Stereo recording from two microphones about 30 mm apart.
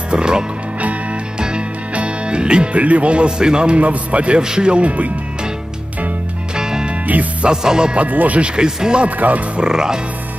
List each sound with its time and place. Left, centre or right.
0.1 s speech: right
2.0 s music: right
2.7 s a man's voice: right
3.3 s speech: right
3.7 s a man's voice: right
4.4 s speech: right
4.8 s speech: right
6.5 s music: right
7.4 s speech: right
8.1 s speech: right
8.4 s speech: right
9.0 s speech: right
9.6 s speech: right